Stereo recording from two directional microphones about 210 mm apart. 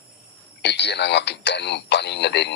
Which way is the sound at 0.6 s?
55° left (ahead or behind).